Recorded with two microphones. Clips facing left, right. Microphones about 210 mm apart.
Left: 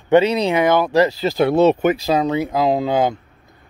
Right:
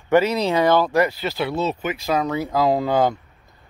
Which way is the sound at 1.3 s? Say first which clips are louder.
Left 9 dB; 55° left (ahead or behind).